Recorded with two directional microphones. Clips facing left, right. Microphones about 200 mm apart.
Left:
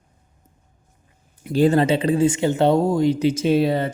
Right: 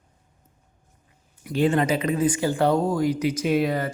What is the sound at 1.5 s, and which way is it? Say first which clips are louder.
Speech: left 4 dB; 35° left (ahead or behind).